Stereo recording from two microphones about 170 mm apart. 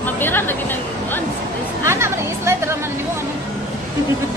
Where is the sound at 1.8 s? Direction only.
15° right (ahead or behind).